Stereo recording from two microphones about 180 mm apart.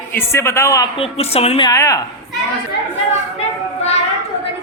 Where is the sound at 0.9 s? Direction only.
30° left (ahead or behind).